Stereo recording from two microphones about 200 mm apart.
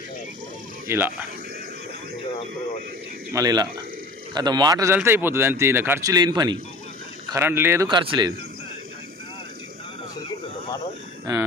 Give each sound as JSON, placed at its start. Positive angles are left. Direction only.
{"t": 0.9, "sound": "speech", "side_deg": -10}
{"t": 3.3, "sound": "a man's voice", "side_deg": -20}
{"t": 7.9, "sound": "speech", "side_deg": -25}